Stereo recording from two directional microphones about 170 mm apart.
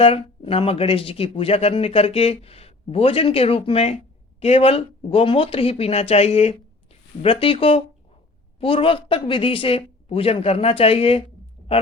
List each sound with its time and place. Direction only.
0.0 s speech: 35° left (ahead or behind)